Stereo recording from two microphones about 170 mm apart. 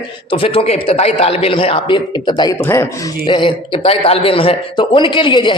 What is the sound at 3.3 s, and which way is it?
A man's voice, 30° left (ahead or behind).